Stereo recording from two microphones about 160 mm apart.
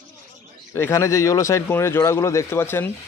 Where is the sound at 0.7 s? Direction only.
15° left (ahead or behind).